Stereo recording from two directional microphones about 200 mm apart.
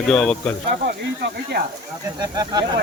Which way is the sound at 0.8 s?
50° right (ahead or behind).